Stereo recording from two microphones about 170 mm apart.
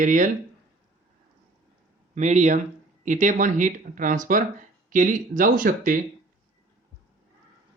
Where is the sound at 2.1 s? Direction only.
45° right (ahead or behind).